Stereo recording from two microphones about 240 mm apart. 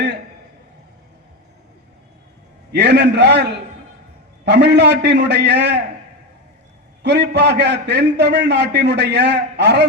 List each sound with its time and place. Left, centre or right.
2.7 s a man's voice: right
7.0 s a man's voice: right